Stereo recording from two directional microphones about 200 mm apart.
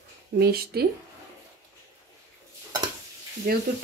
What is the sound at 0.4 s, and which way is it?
Speech, 50° right (ahead or behind).